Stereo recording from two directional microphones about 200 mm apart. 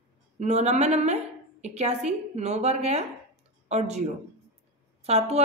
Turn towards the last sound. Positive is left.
turn(degrees=-30)  # may be behind; listen again after turning